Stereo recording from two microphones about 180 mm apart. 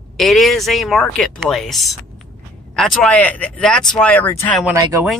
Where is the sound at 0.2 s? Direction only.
Centre (ahead or behind).